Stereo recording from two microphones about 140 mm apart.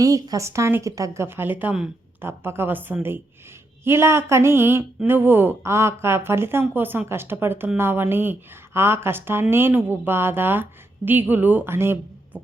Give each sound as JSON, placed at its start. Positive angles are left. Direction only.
{"t": 0.0, "sound": "a woman's voice", "side_deg": -25}